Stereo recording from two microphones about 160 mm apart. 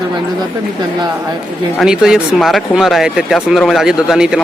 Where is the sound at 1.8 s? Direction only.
5° right (ahead or behind).